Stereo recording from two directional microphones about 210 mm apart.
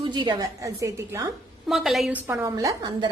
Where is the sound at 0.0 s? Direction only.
20° right (ahead or behind).